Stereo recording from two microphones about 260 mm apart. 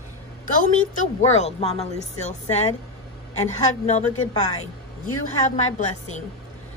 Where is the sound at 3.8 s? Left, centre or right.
Left.